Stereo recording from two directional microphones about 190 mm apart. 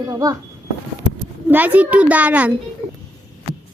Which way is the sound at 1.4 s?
10° right (ahead or behind).